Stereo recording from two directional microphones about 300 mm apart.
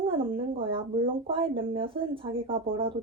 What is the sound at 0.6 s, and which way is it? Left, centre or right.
Speech, centre.